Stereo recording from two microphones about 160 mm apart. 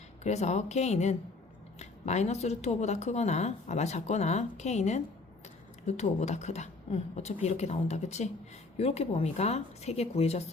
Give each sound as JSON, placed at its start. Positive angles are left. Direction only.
{"t": 0.2, "sound": "speech", "side_deg": 45}